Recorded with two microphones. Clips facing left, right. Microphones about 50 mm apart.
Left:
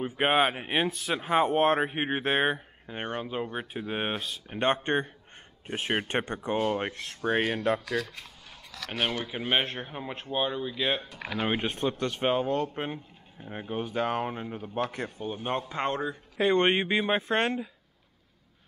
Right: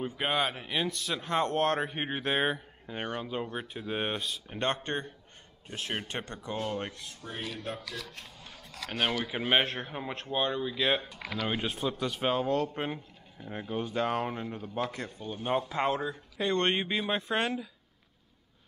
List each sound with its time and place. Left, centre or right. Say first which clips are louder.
0.2 s speech: left 7 dB; left
0.8 s speech: left 4 dB; centre
3.3 s speech: left 2 dB; centre; by 7.0 s left
7.0 s speech: left 13 dB; left
9.2 s speech: right 1 dB; centre
11.3 s speech: left 4 dB; centre
11.9 s speech: left 2 dB; centre
15.5 s speech: right 2 dB; centre